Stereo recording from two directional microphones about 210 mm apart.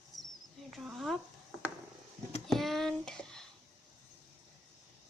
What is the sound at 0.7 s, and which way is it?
Speech, centre (ahead or behind).